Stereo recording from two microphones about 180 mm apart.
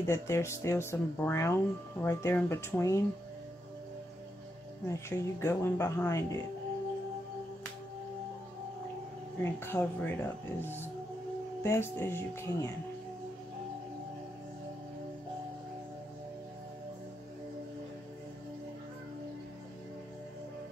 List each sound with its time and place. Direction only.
0.0 s speech: 15° left (ahead or behind)
4.8 s speech: 15° left (ahead or behind)
9.4 s speech: 15° left (ahead or behind)